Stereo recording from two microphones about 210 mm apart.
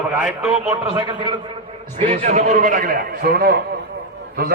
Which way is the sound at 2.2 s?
35° right (ahead or behind).